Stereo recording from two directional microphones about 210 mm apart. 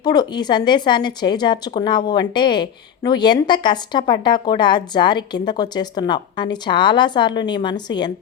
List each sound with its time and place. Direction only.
0.0 s a woman's voice: 20° left (ahead or behind)